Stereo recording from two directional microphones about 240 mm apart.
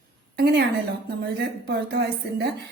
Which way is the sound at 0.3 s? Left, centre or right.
Right.